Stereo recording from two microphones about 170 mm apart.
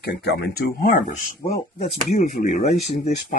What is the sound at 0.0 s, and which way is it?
Speech, 75° left (ahead or behind).